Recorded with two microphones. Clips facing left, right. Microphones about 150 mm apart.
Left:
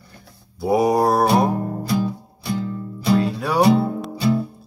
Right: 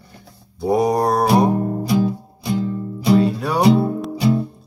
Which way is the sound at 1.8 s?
15° right (ahead or behind).